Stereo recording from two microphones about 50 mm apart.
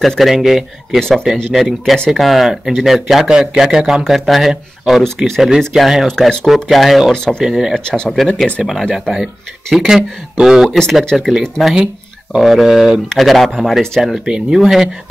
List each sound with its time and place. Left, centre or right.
0.0 s speech: centre
0.9 s speech: centre
1.2 s speech: centre
5.0 s speech: centre
5.7 s speech: centre
6.0 s speech: centre
6.4 s speech: centre
7.1 s speech: centre
7.4 s speech: centre
7.7 s speech: centre
8.6 s speech: centre
11.7 s a sound: centre
12.4 s speech: centre